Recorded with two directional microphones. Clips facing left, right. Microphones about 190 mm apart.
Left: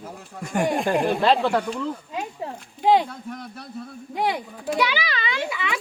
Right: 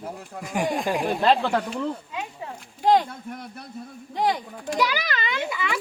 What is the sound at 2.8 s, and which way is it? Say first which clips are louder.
Speech: left 1 dB; 10° left (ahead or behind).